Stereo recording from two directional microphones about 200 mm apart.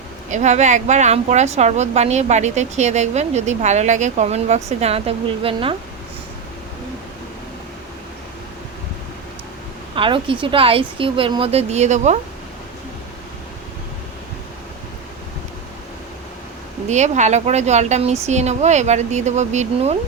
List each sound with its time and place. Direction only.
0.3 s a woman's voice: 35° right (ahead or behind)
9.9 s a woman's voice: 25° right (ahead or behind)
16.9 s a woman's voice: 35° right (ahead or behind)